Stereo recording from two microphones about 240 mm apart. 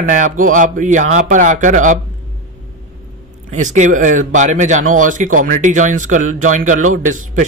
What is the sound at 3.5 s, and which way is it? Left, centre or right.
Speech, right.